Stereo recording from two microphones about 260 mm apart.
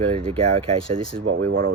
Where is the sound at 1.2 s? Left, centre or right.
Right.